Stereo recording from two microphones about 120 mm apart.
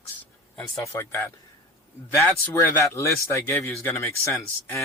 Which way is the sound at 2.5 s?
25° left (ahead or behind).